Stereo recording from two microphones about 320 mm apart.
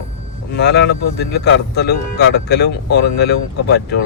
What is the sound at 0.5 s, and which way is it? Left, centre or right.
Speech, left.